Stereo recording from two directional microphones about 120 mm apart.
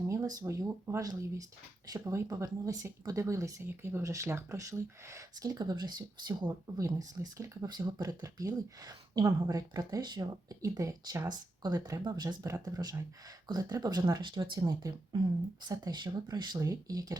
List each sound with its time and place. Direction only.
0.1 s speech: 30° right (ahead or behind)